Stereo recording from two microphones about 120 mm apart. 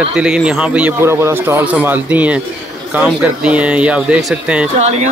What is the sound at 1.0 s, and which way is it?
Speech, 20° right (ahead or behind).